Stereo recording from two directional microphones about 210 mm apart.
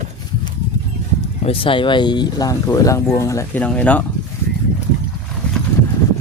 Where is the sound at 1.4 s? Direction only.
25° left (ahead or behind); by 4.0 s 5° left (ahead or behind).